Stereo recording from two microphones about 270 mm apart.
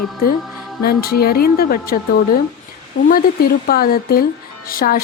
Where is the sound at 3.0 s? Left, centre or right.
Left.